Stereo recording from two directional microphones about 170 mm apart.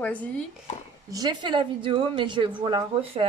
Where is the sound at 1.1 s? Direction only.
25° right (ahead or behind).